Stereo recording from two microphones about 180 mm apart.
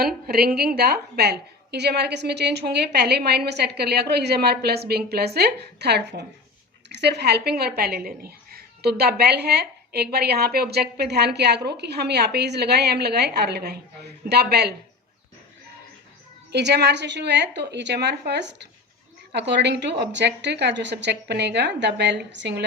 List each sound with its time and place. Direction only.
0.3 s a woman's voice: 60° right (ahead or behind)
16.5 s a woman's voice: 70° right (ahead or behind)